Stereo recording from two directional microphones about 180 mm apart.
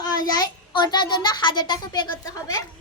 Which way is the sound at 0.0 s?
20° left (ahead or behind).